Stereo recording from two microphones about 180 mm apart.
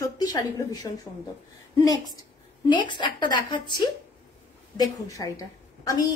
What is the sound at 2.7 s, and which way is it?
Speech, 25° left (ahead or behind).